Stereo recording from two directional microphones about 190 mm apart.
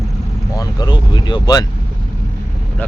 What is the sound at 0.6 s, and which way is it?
Speech, 20° left (ahead or behind).